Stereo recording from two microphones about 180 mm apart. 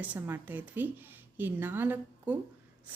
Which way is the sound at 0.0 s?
10° right (ahead or behind).